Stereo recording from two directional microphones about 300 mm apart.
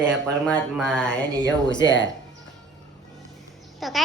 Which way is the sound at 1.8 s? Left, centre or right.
Left.